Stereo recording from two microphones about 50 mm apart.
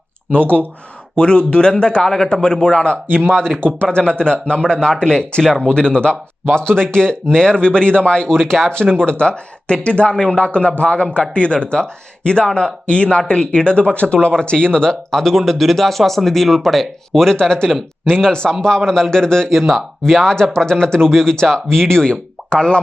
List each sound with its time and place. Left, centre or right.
0.4 s speech: right
1.1 s speech: left